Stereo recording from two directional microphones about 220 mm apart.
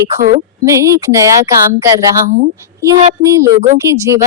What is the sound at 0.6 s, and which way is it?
Speech, 10° right (ahead or behind).